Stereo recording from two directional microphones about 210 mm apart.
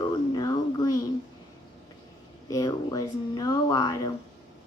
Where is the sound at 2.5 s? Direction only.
15° left (ahead or behind).